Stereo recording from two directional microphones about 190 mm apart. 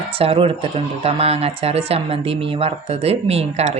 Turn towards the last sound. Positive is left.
turn(degrees=-35)  # may be behind; listen again after turning